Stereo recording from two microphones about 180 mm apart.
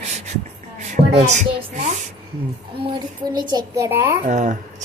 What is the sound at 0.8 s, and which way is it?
Music, 40° right (ahead or behind).